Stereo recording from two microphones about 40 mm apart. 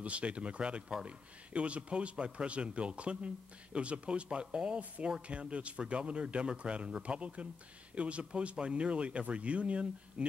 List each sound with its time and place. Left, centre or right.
0.0 s a man's voice: right
4.7 s a man's voice: right